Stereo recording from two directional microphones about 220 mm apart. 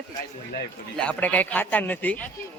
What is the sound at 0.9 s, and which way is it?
Speech, 5° left (ahead or behind).